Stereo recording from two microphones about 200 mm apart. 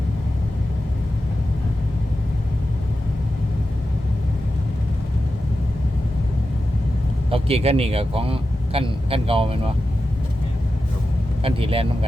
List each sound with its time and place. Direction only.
7.3 s speech: 30° right (ahead or behind)
11.4 s speech: 25° right (ahead or behind)